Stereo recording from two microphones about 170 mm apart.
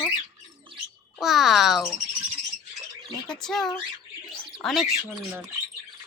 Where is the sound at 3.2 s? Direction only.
5° left (ahead or behind).